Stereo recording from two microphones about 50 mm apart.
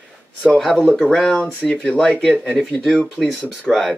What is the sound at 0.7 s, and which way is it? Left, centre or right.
Speech, centre.